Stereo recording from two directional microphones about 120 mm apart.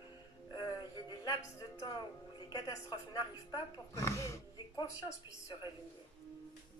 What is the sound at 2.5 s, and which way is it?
A woman's voice, 35° left (ahead or behind).